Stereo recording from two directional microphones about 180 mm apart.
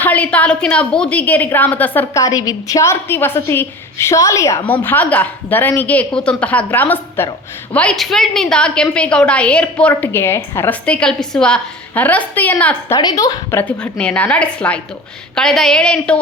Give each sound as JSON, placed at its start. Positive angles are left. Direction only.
{"t": 0.0, "sound": "a woman's voice", "side_deg": 10}
{"t": 13.0, "sound": "a woman's voice", "side_deg": 20}